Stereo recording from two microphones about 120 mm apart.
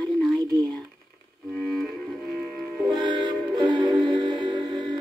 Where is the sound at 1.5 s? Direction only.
5° left (ahead or behind).